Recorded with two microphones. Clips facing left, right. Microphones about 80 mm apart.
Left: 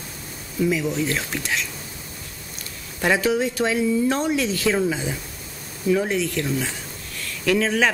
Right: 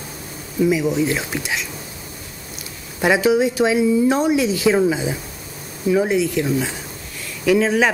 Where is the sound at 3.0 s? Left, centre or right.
Centre.